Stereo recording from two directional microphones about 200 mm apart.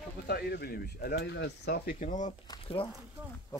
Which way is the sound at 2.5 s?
25° left (ahead or behind).